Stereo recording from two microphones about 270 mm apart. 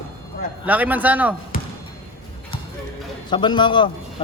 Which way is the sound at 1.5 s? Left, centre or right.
Left.